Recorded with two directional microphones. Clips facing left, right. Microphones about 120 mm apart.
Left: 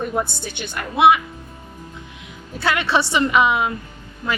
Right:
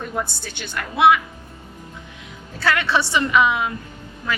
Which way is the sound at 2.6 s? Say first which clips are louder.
Left 1 dB; 15° left (ahead or behind).